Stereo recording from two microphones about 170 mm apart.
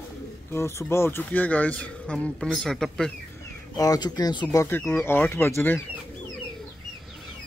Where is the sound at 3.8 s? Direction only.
20° left (ahead or behind).